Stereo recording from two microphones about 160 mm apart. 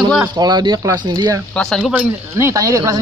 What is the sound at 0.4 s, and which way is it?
Speech, 25° right (ahead or behind).